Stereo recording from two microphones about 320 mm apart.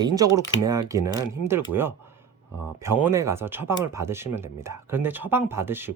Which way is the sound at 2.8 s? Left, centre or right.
Centre.